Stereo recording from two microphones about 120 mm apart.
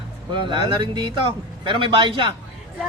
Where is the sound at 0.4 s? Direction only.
40° right (ahead or behind).